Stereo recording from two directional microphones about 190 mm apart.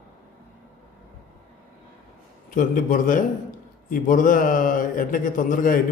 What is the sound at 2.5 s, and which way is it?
A man's voice, 45° left (ahead or behind).